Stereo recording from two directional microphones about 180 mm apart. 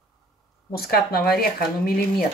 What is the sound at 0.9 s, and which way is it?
Speech, 60° left (ahead or behind).